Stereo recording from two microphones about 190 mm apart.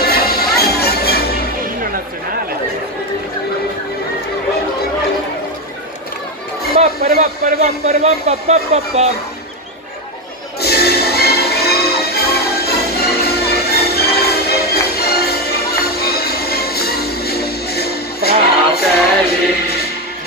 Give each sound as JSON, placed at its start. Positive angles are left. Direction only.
{"t": 0.0, "sound": "music", "side_deg": 55}
{"t": 6.8, "sound": "a man's voice", "side_deg": -45}
{"t": 10.6, "sound": "music", "side_deg": 55}